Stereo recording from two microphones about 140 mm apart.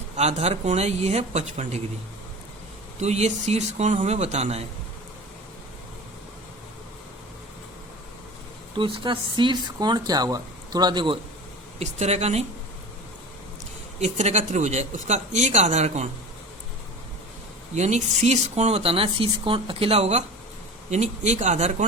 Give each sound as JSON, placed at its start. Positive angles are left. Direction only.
{"t": 0.2, "sound": "speech", "side_deg": -50}
{"t": 3.0, "sound": "speech", "side_deg": -55}
{"t": 8.7, "sound": "speech", "side_deg": -35}
{"t": 11.8, "sound": "speech", "side_deg": -55}
{"t": 14.0, "sound": "speech", "side_deg": -55}
{"t": 17.7, "sound": "speech", "side_deg": -55}